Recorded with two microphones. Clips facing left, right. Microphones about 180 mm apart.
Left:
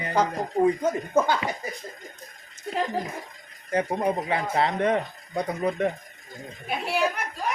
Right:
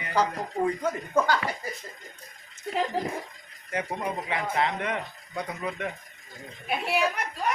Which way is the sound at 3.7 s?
35° left (ahead or behind).